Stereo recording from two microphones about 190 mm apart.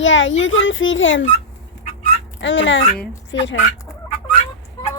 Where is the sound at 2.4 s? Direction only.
75° left (ahead or behind).